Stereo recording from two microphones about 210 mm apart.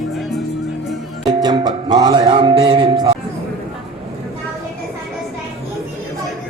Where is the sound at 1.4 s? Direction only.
20° right (ahead or behind).